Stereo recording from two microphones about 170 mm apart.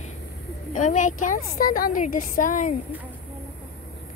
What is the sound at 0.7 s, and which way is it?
A woman's voice, 45° left (ahead or behind).